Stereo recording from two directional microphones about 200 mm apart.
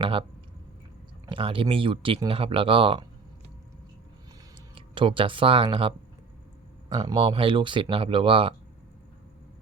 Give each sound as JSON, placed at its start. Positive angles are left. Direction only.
{"t": 0.0, "sound": "speech", "side_deg": -25}
{"t": 1.3, "sound": "speech", "side_deg": -25}
{"t": 4.7, "sound": "speech", "side_deg": -25}
{"t": 6.9, "sound": "speech", "side_deg": -25}